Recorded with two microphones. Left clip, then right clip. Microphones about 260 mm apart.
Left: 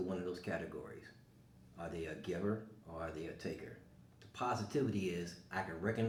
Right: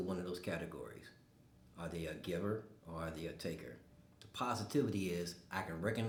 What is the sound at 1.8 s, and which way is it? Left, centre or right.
Speech, right.